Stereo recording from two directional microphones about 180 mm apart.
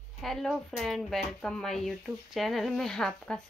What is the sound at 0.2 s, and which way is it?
Speech, centre (ahead or behind).